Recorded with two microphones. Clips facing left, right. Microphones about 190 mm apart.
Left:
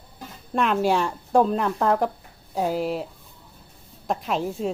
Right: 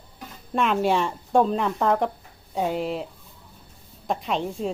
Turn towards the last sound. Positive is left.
turn(degrees=5)  # may be behind; listen again after turning